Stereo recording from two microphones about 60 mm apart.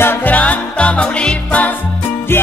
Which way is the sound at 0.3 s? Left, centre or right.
Left.